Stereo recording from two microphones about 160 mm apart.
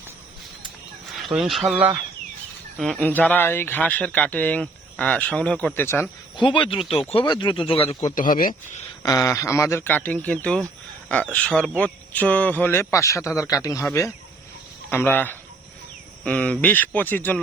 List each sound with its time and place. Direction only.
1.2 s speech: centre (ahead or behind); by 6.1 s 15° left (ahead or behind)
6.3 s speech: 30° left (ahead or behind)
8.1 s speech: 55° left (ahead or behind)
9.0 s speech: 20° left (ahead or behind)